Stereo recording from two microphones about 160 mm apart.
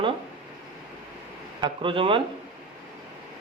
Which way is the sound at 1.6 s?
30° right (ahead or behind).